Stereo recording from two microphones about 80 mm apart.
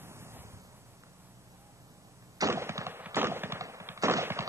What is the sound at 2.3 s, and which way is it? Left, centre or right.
Fireworks, right.